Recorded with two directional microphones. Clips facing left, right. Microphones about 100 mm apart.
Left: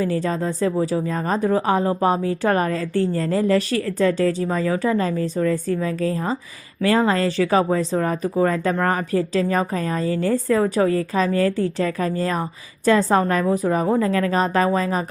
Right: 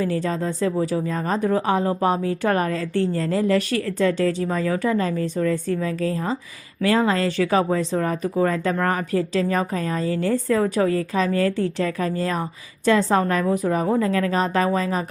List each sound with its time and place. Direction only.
0.0 s speech: 35° left (ahead or behind)